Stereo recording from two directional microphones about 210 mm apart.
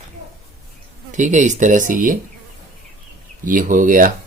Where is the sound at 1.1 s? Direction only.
35° right (ahead or behind).